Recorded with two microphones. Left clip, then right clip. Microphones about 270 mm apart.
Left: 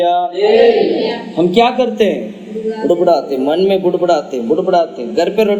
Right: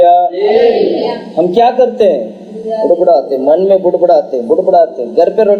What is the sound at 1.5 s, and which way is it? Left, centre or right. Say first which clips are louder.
Speech: right 3 dB; left.